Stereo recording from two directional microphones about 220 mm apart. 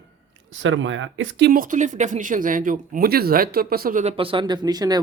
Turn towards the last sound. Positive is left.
turn(degrees=-20)  # may be behind; listen again after turning